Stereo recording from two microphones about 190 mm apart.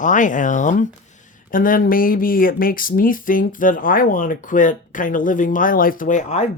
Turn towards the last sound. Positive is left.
turn(degrees=40)  # may be behind; listen again after turning